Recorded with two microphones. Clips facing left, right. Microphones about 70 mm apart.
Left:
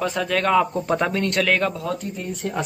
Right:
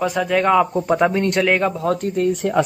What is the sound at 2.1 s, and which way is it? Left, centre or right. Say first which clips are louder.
Speech: right 10 dB; right.